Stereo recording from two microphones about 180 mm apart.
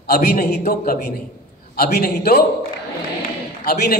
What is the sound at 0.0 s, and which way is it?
A man's voice, 60° left (ahead or behind).